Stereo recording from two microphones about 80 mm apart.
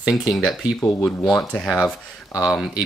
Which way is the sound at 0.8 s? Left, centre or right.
Left.